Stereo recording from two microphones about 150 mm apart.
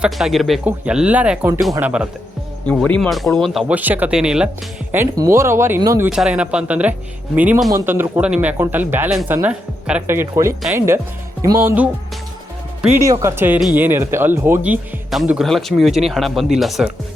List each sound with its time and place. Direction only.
0.0 s speech: centre (ahead or behind)
2.6 s speech: 10° left (ahead or behind)
3.7 s speech: 10° right (ahead or behind)
5.1 s speech: 20° right (ahead or behind)
6.1 s speech: 5° right (ahead or behind)